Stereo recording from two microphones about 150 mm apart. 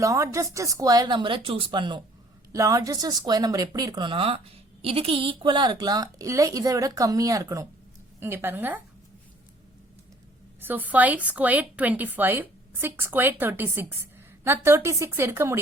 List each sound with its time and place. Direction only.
0.0 s a woman's voice: 20° right (ahead or behind)
10.6 s a woman's voice: 10° right (ahead or behind)